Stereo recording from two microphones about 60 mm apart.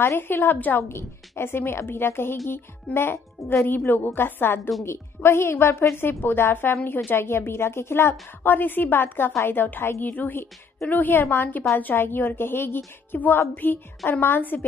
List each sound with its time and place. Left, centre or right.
0.0 s a woman's voice: left
0.8 s a woman's voice: left
3.3 s a woman's voice: left
3.6 s a woman's voice: left
10.1 s a woman's voice: left